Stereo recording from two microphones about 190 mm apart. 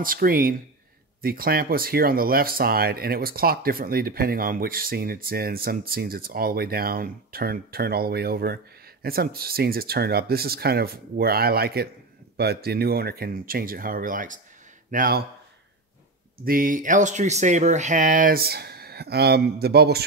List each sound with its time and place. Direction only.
0.0 s speech: 50° right (ahead or behind)
16.4 s speech: 45° right (ahead or behind)